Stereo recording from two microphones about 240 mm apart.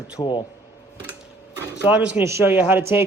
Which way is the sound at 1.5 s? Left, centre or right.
Centre.